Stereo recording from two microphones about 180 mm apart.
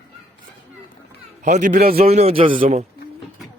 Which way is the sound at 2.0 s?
35° right (ahead or behind).